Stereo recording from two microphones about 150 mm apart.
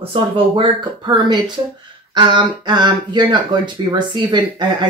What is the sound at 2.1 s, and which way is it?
Speech, 30° right (ahead or behind).